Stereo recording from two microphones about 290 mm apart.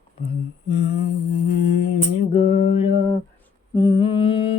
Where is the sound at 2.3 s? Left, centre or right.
Centre.